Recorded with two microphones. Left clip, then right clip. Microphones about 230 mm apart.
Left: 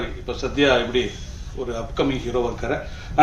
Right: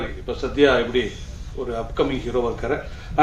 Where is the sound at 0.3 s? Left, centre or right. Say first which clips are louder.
Right 1 dB; left.